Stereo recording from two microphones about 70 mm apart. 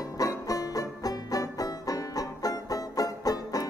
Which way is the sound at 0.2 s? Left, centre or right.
Left.